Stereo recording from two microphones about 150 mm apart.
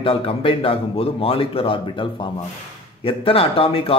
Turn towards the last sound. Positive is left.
turn(degrees=40)  # may be behind; listen again after turning